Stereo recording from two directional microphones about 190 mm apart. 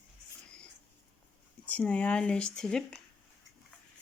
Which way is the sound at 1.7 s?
5° left (ahead or behind).